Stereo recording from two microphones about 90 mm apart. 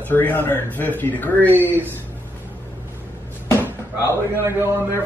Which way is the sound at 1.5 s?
20° right (ahead or behind).